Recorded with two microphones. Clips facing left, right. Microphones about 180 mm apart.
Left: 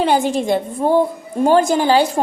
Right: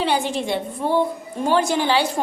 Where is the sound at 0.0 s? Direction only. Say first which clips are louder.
Left 5 dB; 45° left (ahead or behind).